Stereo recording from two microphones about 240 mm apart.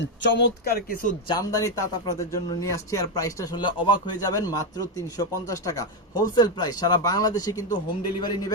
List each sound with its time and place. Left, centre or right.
0.0 s speech: left
1.3 s a man's voice: centre